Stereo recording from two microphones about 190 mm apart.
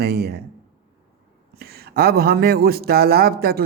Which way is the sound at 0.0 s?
55° right (ahead or behind).